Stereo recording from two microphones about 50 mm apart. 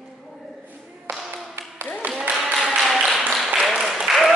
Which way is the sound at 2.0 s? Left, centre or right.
Right.